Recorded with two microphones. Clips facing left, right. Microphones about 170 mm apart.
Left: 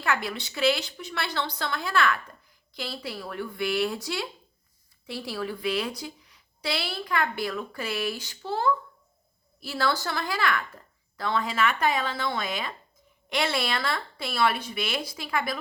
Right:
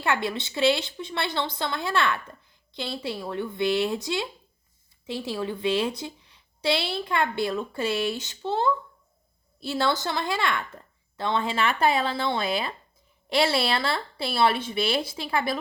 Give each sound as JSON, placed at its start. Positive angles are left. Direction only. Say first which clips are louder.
{"t": 0.0, "sound": "speech", "louder": "right 2 dB", "side_deg": -25}